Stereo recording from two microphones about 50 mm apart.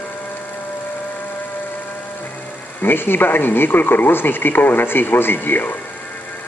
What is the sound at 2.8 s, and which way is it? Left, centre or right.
Speech, left.